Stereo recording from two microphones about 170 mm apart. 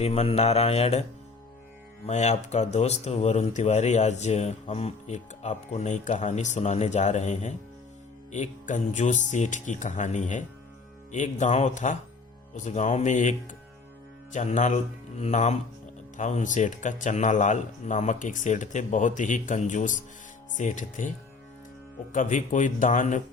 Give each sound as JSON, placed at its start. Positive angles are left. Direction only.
{"t": 0.0, "sound": "mantra", "side_deg": 35}
{"t": 2.0, "sound": "speech", "side_deg": 40}
{"t": 14.3, "sound": "speech", "side_deg": 45}
{"t": 22.1, "sound": "speech", "side_deg": 50}